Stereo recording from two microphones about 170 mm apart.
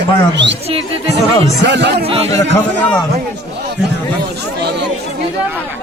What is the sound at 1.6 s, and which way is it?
Speech, 90° right.